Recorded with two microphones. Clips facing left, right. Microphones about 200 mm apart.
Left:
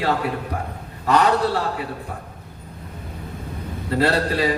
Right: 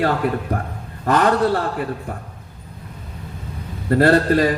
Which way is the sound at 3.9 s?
50° right (ahead or behind).